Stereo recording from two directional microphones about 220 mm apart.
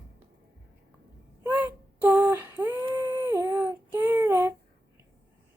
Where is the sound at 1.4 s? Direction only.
10° right (ahead or behind).